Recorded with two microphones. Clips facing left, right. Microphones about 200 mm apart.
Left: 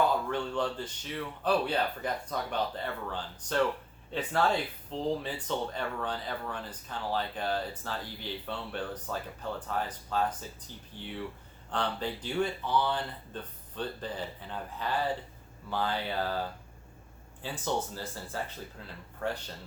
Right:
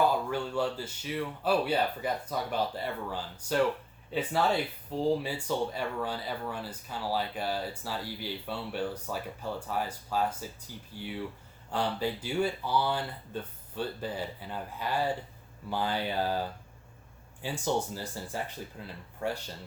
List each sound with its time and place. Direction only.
0.3 s speech: 5° right (ahead or behind)
17.4 s speech: 10° right (ahead or behind)